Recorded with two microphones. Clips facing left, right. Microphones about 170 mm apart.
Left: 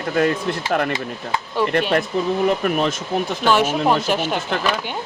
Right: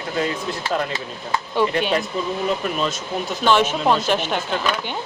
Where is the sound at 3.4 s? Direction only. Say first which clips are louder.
Even; 10° left (ahead or behind).